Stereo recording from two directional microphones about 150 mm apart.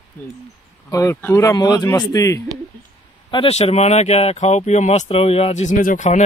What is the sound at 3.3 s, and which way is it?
Speech, 40° left (ahead or behind).